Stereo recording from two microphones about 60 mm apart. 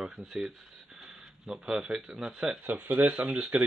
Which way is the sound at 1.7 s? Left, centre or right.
Centre.